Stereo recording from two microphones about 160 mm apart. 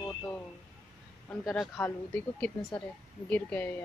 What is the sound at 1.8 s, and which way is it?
A woman's voice, 10° left (ahead or behind).